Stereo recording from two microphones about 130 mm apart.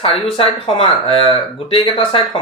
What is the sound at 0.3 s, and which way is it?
Speech, 45° left (ahead or behind).